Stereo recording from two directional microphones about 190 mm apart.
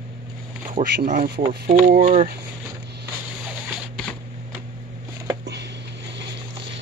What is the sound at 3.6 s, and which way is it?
Zipper, centre (ahead or behind).